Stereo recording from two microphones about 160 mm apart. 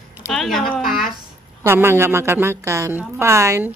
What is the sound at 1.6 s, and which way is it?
A woman's voice, 15° right (ahead or behind).